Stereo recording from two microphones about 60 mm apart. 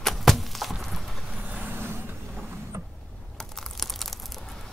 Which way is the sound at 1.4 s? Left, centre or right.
Right.